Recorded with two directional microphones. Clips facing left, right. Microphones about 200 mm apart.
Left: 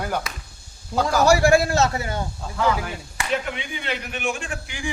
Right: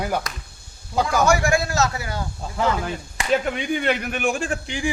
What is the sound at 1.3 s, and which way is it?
Speech, 35° left (ahead or behind).